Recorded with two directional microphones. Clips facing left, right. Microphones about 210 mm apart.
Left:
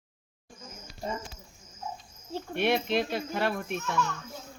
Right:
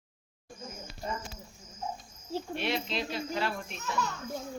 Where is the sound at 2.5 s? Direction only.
55° left (ahead or behind).